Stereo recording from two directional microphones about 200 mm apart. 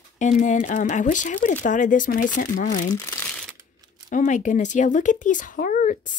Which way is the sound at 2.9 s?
15° left (ahead or behind).